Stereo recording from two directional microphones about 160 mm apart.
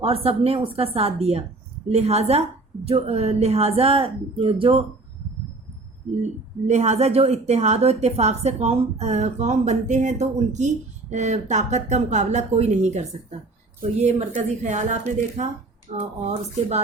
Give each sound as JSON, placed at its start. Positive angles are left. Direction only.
{"t": 0.0, "sound": "a woman's voice", "side_deg": -35}
{"t": 6.7, "sound": "a woman's voice", "side_deg": -45}